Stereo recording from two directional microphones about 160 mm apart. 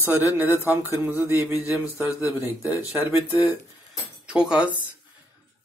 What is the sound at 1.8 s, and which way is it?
Speech, 15° left (ahead or behind).